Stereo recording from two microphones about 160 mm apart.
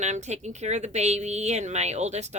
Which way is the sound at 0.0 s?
45° right (ahead or behind).